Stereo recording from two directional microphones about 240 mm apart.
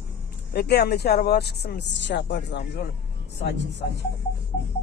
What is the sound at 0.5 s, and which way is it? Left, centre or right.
Speech, left.